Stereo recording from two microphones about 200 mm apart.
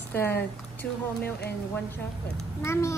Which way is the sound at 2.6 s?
15° left (ahead or behind).